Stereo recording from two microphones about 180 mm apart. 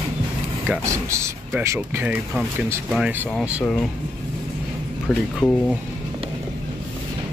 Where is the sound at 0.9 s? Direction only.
15° right (ahead or behind).